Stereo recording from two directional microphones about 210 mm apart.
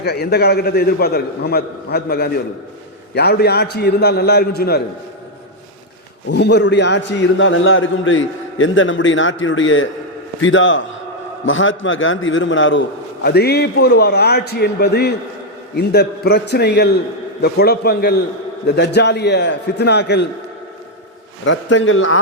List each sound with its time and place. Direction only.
0.0 s a man's voice: 50° left (ahead or behind)
6.2 s a man's voice: 55° left (ahead or behind)
13.2 s a man's voice: 50° left (ahead or behind)
21.4 s a man's voice: 60° left (ahead or behind)